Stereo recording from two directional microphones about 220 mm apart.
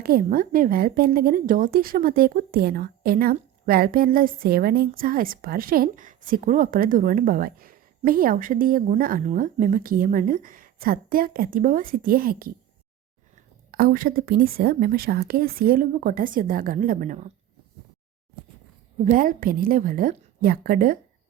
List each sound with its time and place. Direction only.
0.0 s a woman's voice: 40° right (ahead or behind)
13.7 s a woman's voice: 40° right (ahead or behind)
19.0 s a woman's voice: 40° right (ahead or behind)